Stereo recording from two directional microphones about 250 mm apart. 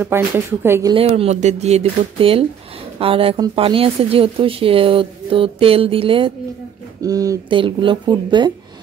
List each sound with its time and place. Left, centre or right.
0.0 s speech: centre
0.9 s speech: right